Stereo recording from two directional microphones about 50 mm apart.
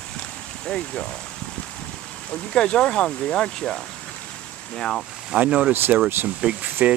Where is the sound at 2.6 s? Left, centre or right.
Centre.